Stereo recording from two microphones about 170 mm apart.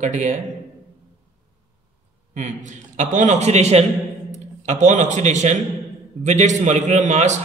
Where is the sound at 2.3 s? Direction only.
45° right (ahead or behind).